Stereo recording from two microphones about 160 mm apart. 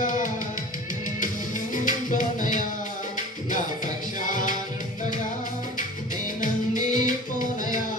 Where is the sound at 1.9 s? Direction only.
55° left (ahead or behind).